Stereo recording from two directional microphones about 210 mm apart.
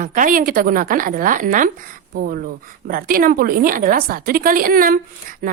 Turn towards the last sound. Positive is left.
turn(degrees=-40)  # may be behind; listen again after turning